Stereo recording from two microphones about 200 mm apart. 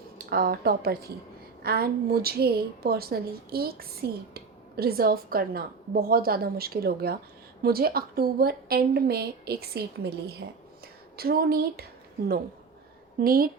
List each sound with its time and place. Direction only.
0.3 s a woman's voice: 50° right (ahead or behind)
13.1 s a woman's voice: 45° right (ahead or behind)